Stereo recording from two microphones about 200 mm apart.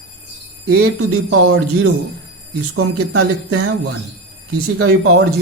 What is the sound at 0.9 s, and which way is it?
Speech, 90° right.